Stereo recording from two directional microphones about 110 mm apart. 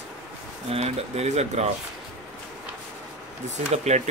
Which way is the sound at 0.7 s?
80° right.